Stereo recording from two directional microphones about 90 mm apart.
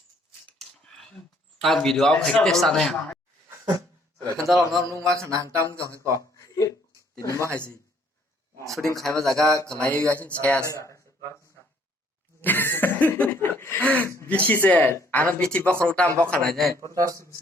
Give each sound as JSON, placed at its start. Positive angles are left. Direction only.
{"t": 0.9, "sound": "a sound", "side_deg": 5}
{"t": 1.6, "sound": "a man's voice", "side_deg": 5}
{"t": 4.4, "sound": "a man's voice", "side_deg": 0}
{"t": 4.9, "sound": "mantra", "side_deg": -35}
{"t": 6.1, "sound": "a sound", "side_deg": 40}
{"t": 7.2, "sound": "a man's voice", "side_deg": 35}
{"t": 9.0, "sound": "a man's voice", "side_deg": 5}
{"t": 10.7, "sound": "a sound", "side_deg": 35}
{"t": 12.4, "sound": "speech", "side_deg": 20}
{"t": 16.9, "sound": "mantra", "side_deg": -40}